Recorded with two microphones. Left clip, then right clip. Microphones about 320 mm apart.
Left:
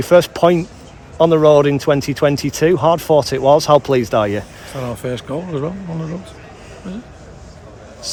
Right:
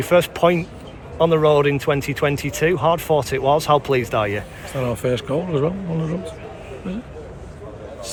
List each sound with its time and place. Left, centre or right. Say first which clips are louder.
0.0 s speech: left 4 dB; left
4.8 s speech: right 2 dB; centre